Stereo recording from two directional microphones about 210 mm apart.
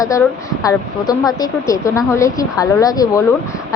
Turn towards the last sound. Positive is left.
turn(degrees=15)  # may be behind; listen again after turning